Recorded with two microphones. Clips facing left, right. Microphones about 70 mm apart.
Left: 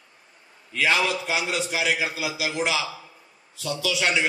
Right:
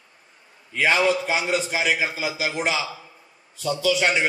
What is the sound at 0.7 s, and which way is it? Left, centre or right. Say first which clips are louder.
A man's voice: right 3 dB; right.